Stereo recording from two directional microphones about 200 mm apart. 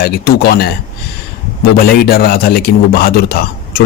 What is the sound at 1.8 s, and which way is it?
A man's voice, 50° left (ahead or behind).